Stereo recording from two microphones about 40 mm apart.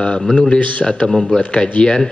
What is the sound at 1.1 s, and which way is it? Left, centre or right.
Speech, centre.